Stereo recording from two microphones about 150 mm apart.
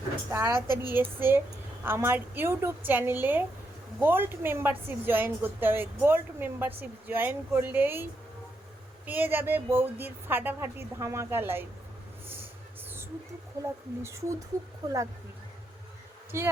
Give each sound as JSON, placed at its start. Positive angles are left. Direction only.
{"t": 0.3, "sound": "a woman's voice", "side_deg": -15}
{"t": 9.0, "sound": "a woman's voice", "side_deg": -10}
{"t": 13.6, "sound": "speech", "side_deg": -20}
{"t": 16.3, "sound": "speech", "side_deg": -20}